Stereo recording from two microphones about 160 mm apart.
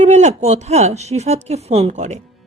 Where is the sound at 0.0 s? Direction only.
45° right (ahead or behind).